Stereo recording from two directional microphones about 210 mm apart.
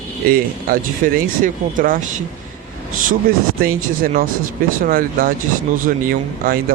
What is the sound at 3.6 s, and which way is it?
Speech, 45° right (ahead or behind).